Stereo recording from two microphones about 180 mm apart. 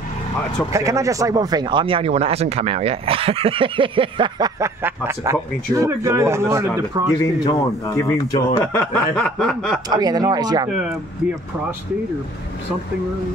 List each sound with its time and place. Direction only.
0.7 s speech: 15° right (ahead or behind)
4.6 s speech: 15° right (ahead or behind)
7.2 s speech: 20° left (ahead or behind); by 9.8 s 5° left (ahead or behind)
9.8 s speech: 20° right (ahead or behind)